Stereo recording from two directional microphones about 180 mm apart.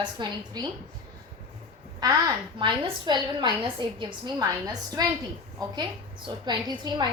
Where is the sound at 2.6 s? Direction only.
25° right (ahead or behind).